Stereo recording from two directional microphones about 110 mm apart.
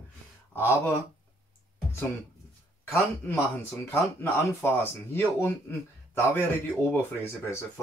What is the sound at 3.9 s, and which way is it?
Speech, 20° left (ahead or behind).